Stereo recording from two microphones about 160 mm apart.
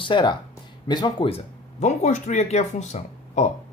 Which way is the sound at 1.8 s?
45° left (ahead or behind).